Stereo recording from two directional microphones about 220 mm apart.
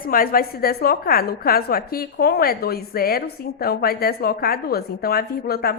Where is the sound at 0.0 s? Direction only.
40° left (ahead or behind).